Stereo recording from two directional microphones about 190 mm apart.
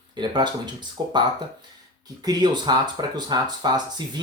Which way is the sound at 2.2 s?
20° right (ahead or behind).